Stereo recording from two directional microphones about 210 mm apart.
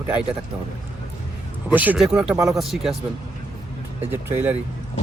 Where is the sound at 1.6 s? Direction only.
10° right (ahead or behind).